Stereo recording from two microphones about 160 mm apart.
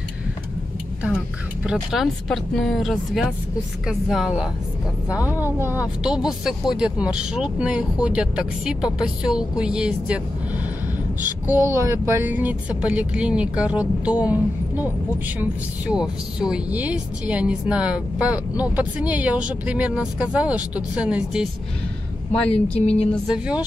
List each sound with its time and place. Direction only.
1.6 s speech: 5° right (ahead or behind)
22.5 s speech: 40° left (ahead or behind)
23.2 s speech: 5° right (ahead or behind)